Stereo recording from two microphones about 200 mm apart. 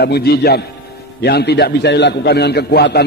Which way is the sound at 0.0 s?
50° left (ahead or behind).